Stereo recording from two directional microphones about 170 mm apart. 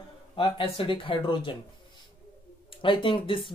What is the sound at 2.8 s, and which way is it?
Speech, 30° left (ahead or behind).